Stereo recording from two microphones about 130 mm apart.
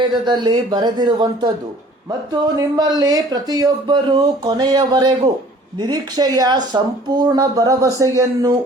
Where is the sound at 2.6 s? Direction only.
30° right (ahead or behind).